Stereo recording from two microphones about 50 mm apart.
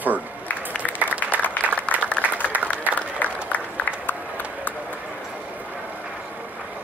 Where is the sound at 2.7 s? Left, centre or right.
Left.